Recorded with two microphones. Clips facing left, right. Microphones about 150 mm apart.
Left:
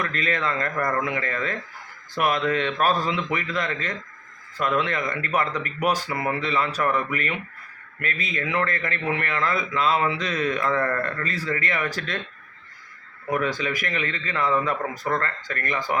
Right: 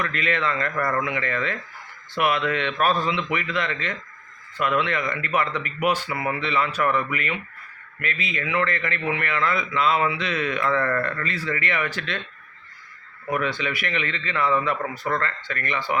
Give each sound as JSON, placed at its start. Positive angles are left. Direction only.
{"t": 0.0, "sound": "a man's voice", "side_deg": 35}
{"t": 13.4, "sound": "a man's voice", "side_deg": 40}